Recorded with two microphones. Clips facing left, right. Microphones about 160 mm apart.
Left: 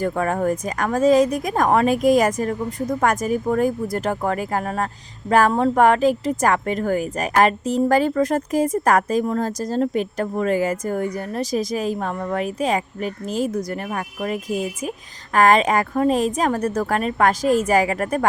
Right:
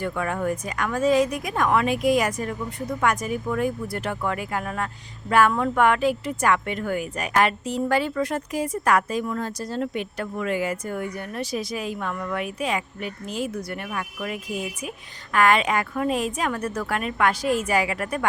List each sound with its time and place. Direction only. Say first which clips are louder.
0.0 s speech: left 5 dB; 40° left (ahead or behind)